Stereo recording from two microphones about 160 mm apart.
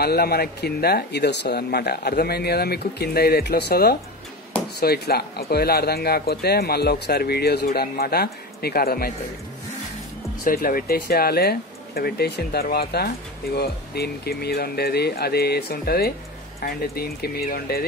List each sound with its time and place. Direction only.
0.0 s speech: 75° left (ahead or behind)
10.4 s speech: 65° left (ahead or behind)